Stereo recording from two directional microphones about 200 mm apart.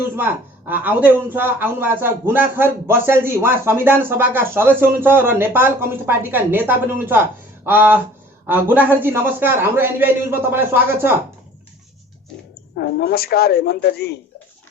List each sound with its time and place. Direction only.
0.7 s a man's voice: 10° right (ahead or behind)
12.7 s a woman's voice: 50° left (ahead or behind)